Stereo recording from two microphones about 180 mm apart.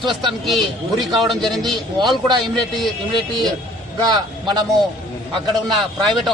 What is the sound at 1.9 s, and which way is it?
Speech, 25° right (ahead or behind).